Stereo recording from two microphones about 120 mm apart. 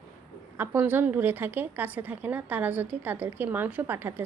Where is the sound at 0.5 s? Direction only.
15° right (ahead or behind).